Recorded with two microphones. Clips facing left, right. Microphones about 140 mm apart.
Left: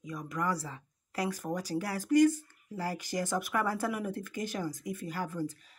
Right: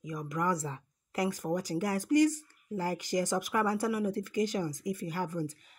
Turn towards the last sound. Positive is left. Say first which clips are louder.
# right 1 dB
turn(degrees=-15)  # may be behind; listen again after turning